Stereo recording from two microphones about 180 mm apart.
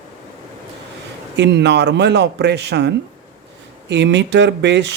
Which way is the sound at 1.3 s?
70° right (ahead or behind).